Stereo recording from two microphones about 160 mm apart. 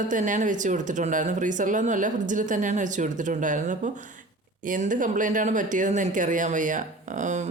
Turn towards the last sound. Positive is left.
turn(degrees=-50)  # may be behind; listen again after turning